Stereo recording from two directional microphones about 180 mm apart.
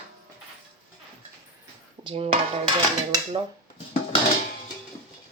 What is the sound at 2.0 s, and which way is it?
Speech, 30° right (ahead or behind).